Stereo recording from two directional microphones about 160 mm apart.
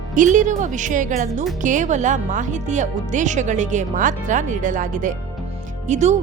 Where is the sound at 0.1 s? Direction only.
55° right (ahead or behind).